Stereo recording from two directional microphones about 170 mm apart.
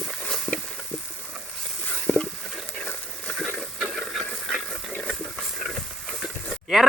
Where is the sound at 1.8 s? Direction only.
5° left (ahead or behind).